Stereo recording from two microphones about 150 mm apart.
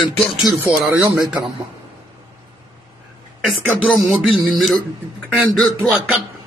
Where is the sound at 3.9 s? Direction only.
Centre (ahead or behind).